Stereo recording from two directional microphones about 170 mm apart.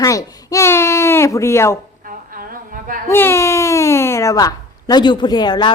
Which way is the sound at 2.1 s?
55° right (ahead or behind).